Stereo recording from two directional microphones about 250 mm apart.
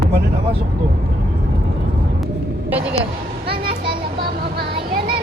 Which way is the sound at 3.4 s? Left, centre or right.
Right.